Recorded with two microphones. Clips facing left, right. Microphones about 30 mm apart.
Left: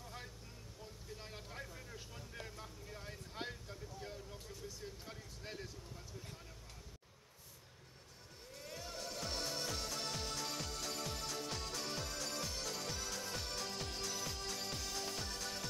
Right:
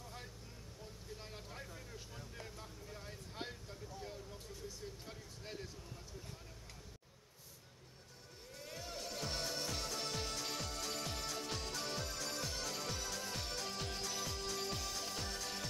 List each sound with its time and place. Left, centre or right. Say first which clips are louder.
0.0 s vehicle: left 1 dB; centre
5.0 s a sound: even; centre
8.5 s music: even; centre